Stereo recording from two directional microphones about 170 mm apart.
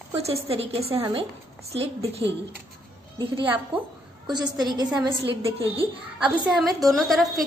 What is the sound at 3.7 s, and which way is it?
A woman's voice, 30° right (ahead or behind).